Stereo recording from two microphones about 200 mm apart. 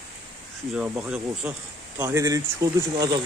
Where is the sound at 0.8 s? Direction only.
5° right (ahead or behind).